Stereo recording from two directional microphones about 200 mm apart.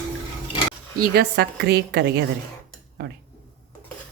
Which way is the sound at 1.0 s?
50° right (ahead or behind).